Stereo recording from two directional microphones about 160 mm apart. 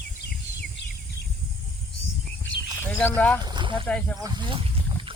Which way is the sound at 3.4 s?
30° right (ahead or behind).